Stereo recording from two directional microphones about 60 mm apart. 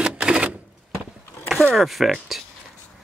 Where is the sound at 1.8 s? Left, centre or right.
Centre.